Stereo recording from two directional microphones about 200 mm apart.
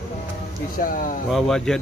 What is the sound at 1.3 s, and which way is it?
Speech, centre (ahead or behind).